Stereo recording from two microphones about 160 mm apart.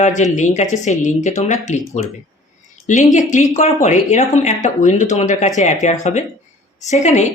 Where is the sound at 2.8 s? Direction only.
50° left (ahead or behind).